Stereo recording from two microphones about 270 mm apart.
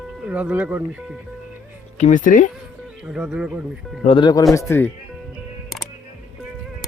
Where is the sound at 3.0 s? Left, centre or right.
Centre.